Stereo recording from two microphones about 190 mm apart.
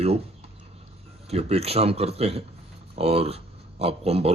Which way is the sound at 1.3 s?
35° right (ahead or behind).